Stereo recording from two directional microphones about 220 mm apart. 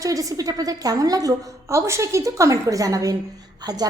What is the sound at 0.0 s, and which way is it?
A woman's voice, 15° right (ahead or behind).